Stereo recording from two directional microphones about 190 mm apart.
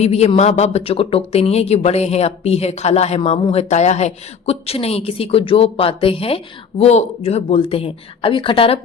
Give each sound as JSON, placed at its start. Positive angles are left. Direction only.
{"t": 0.0, "sound": "speech", "side_deg": 35}